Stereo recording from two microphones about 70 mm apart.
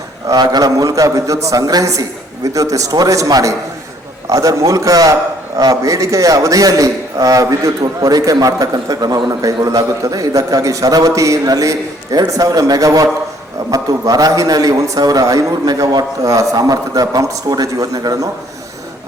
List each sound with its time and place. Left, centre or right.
0.3 s a man's voice: right
16.2 s a man's voice: right